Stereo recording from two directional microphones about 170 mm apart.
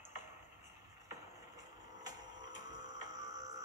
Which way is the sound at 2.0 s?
25° right (ahead or behind).